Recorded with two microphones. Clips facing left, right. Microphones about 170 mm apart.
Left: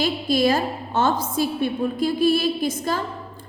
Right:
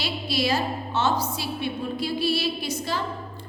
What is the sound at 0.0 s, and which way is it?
A woman's voice, 50° left (ahead or behind).